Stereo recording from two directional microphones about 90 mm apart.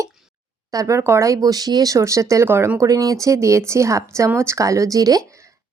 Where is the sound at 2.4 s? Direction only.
25° right (ahead or behind).